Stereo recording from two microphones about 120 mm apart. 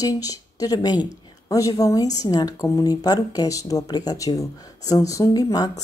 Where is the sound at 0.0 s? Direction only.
30° left (ahead or behind).